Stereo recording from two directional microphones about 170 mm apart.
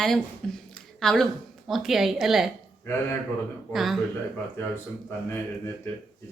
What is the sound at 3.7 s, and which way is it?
Speech, centre (ahead or behind).